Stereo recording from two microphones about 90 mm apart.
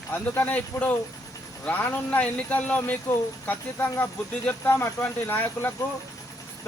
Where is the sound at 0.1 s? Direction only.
20° left (ahead or behind).